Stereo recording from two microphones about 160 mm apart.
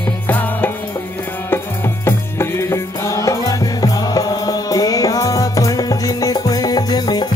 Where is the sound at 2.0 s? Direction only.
15° left (ahead or behind).